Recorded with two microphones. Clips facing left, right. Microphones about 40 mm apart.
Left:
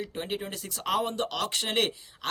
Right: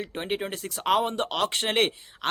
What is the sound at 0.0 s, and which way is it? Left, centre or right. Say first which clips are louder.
A man's voice: right 3 dB; right.